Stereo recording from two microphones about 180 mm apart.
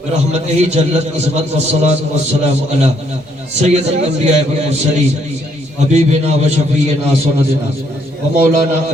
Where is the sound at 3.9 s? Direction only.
40° right (ahead or behind).